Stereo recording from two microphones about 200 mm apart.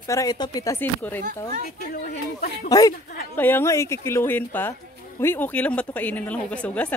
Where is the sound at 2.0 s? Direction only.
45° left (ahead or behind).